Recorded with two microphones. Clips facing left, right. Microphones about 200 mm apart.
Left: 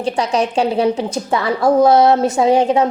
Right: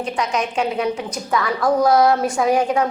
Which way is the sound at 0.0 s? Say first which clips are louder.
Left 5 dB; 35° left (ahead or behind).